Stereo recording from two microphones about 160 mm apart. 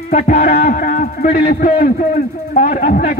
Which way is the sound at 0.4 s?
60° left (ahead or behind).